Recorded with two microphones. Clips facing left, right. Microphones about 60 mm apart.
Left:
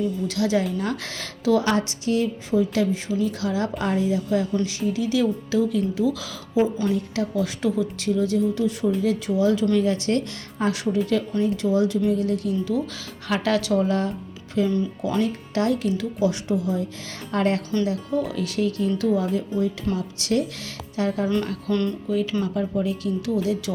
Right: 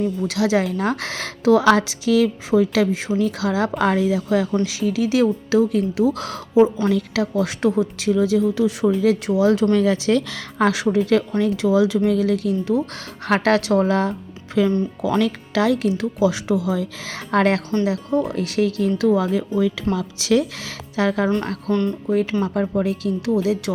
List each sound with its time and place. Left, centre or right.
0.0 s a woman's voice: right
6.1 s speech: right
6.8 s a woman's voice: right
9.7 s speech: right
10.9 s a woman's voice: right
11.9 s a woman's voice: right
12.7 s a woman's voice: right
18.3 s a woman's voice: right
20.0 s speech: right
21.7 s speech: right
22.1 s speech: right